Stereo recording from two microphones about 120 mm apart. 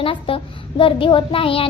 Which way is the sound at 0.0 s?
45° left (ahead or behind).